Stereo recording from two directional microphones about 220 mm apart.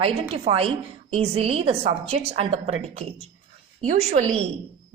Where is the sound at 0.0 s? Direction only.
25° right (ahead or behind).